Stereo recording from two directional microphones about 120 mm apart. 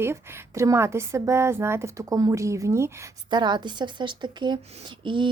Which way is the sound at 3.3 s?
40° right (ahead or behind).